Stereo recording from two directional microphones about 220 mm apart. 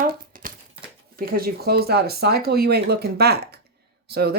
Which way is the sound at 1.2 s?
40° right (ahead or behind).